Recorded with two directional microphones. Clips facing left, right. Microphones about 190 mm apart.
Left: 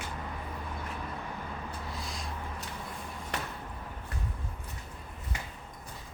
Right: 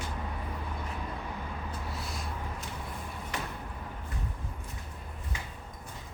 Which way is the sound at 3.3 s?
60° left (ahead or behind).